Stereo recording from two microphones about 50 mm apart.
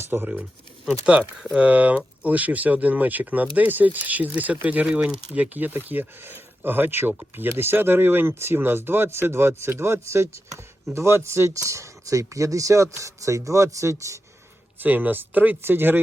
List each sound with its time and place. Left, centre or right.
0.0 s speech: right
1.4 s speech: centre
1.6 s speech: right
4.9 s speech: centre
5.3 s speech: right
14.8 s speech: right